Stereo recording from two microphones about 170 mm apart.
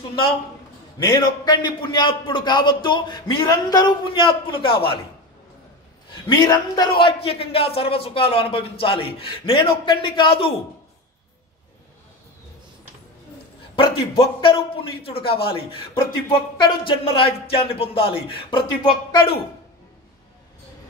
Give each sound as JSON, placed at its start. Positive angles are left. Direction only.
{"t": 0.9, "sound": "a man's voice", "side_deg": 25}
{"t": 6.2, "sound": "a man's voice", "side_deg": 20}
{"t": 13.7, "sound": "a man's voice", "side_deg": 30}